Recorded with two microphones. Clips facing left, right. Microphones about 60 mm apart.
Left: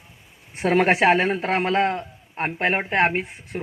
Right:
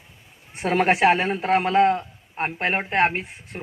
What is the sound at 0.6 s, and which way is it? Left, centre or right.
Speech, left.